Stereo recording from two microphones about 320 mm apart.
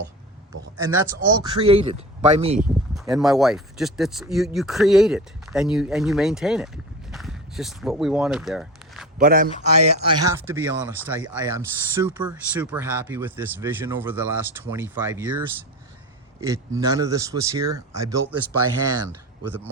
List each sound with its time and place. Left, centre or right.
0.8 s speech: centre
2.6 s speech: centre
7.1 s a sound: centre
9.1 s a man's voice: right
10.0 s speech: centre
18.5 s speech: right